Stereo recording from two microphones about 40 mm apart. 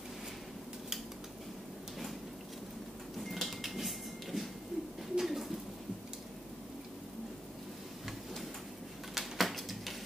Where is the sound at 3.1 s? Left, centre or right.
Centre.